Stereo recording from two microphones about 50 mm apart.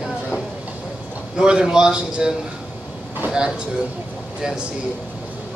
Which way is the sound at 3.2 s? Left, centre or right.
Right.